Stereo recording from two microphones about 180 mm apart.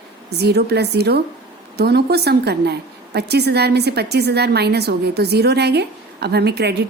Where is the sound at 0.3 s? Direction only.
65° right (ahead or behind).